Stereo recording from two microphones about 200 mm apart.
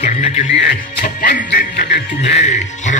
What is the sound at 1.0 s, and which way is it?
Music, 45° left (ahead or behind).